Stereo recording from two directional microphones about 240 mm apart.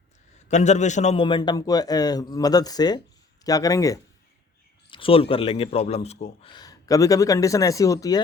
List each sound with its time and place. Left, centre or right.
0.3 s a man's voice: left